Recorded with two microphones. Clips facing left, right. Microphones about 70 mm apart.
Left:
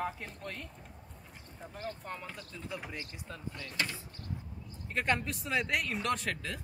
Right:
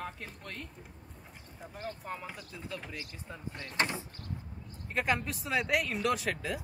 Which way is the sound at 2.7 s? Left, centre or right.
Centre.